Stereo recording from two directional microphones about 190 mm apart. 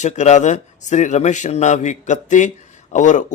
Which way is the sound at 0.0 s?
40° left (ahead or behind).